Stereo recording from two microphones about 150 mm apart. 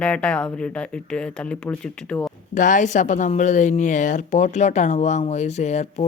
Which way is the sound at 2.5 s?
60° left (ahead or behind).